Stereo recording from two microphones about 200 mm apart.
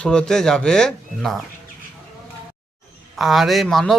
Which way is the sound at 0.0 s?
5° left (ahead or behind).